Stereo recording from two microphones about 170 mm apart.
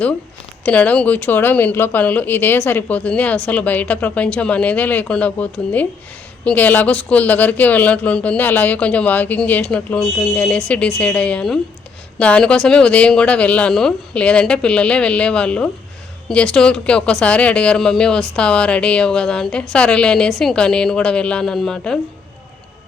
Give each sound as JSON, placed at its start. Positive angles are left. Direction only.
{"t": 0.6, "sound": "speech", "side_deg": 10}